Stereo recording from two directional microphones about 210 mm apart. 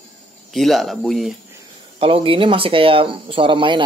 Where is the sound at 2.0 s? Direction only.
25° right (ahead or behind).